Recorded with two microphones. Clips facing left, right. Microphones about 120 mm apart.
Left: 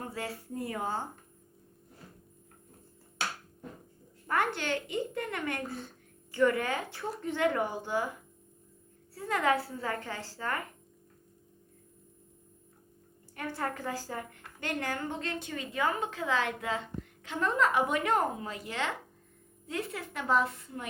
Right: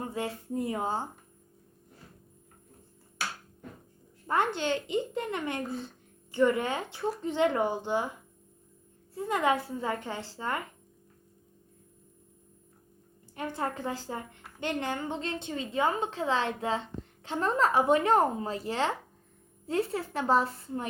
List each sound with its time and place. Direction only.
0.0 s a woman's voice: 20° right (ahead or behind)
4.3 s a woman's voice: 20° right (ahead or behind)
9.1 s a woman's voice: 20° right (ahead or behind)
13.3 s a woman's voice: 20° right (ahead or behind)